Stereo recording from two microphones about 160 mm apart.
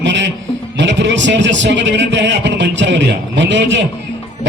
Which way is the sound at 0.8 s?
90° right.